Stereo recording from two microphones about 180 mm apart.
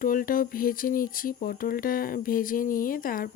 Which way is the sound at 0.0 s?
50° left (ahead or behind).